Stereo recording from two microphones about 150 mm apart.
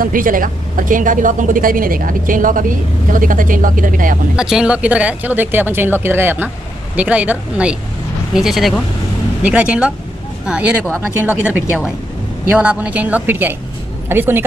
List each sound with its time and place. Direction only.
0.0 s a woman's voice: 70° right (ahead or behind)
4.4 s speech: 5° right (ahead or behind)